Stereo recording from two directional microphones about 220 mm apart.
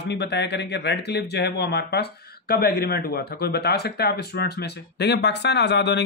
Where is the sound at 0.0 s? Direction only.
50° left (ahead or behind).